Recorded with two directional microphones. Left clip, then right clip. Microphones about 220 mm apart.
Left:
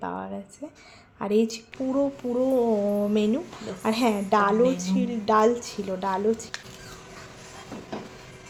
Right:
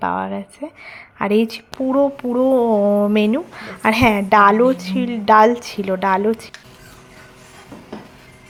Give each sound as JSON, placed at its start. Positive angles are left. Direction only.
{"t": 0.0, "sound": "speech", "side_deg": -25}